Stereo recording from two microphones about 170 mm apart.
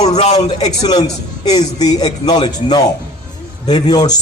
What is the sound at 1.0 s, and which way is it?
A man's voice, 25° left (ahead or behind).